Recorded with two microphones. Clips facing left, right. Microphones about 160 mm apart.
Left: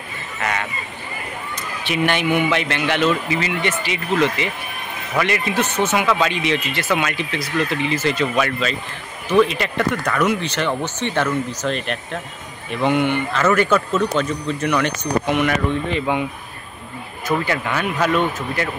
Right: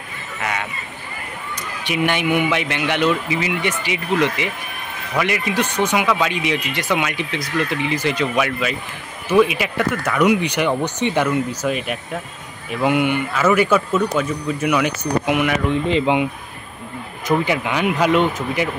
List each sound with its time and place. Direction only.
1.9 s speech: 15° right (ahead or behind)
15.9 s speech: 20° right (ahead or behind)
17.3 s speech: 15° right (ahead or behind)